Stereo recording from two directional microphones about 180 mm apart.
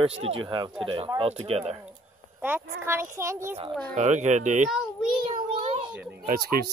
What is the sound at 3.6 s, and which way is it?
Speech, 40° right (ahead or behind).